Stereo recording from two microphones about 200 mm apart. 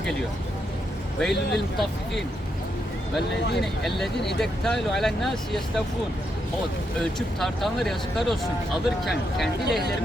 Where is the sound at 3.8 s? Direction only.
Centre (ahead or behind).